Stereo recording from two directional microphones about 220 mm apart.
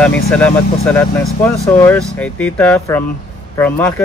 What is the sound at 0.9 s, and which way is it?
Speech, 10° left (ahead or behind).